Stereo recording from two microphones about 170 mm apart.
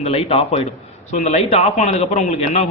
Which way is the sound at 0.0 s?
35° left (ahead or behind).